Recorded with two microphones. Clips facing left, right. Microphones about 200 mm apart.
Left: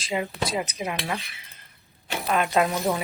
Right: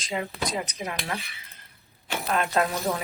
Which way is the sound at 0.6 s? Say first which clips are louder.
Left 3 dB; 15° left (ahead or behind).